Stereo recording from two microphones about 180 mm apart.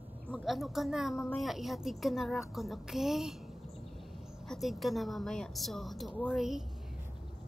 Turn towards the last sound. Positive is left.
turn(degrees=0)  # may be behind; listen again after turning